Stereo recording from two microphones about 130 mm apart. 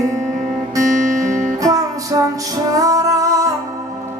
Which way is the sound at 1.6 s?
25° right (ahead or behind).